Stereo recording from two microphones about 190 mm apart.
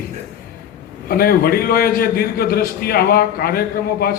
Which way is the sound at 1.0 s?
50° left (ahead or behind).